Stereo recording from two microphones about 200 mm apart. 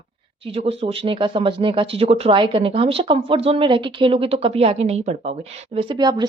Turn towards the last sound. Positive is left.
turn(degrees=-20)  # may be behind; listen again after turning